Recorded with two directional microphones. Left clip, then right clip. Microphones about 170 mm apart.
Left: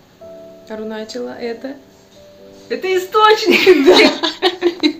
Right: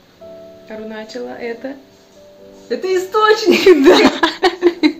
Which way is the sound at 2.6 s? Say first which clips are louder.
Even; 20° right (ahead or behind).